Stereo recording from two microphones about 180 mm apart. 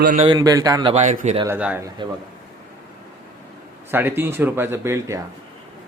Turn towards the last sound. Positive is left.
turn(degrees=-15)  # may be behind; listen again after turning